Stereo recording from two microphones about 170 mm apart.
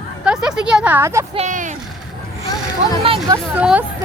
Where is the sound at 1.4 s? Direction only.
45° right (ahead or behind).